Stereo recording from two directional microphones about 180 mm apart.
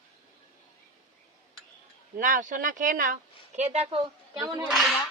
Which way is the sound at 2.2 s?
45° right (ahead or behind).